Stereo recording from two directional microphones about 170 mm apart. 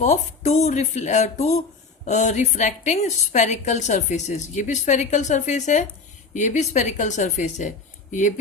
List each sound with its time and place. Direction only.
0.0 s a woman's voice: 40° left (ahead or behind)